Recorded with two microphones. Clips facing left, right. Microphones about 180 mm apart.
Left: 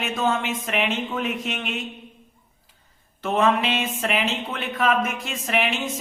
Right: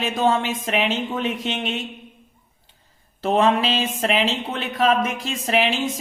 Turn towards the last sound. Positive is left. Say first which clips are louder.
# right 3 dB
turn(degrees=-35)  # may be behind; listen again after turning